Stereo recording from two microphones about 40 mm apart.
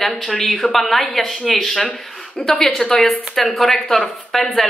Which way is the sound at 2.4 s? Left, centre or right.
Left.